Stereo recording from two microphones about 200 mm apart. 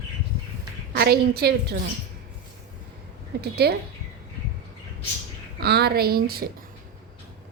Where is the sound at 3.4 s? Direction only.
55° right (ahead or behind).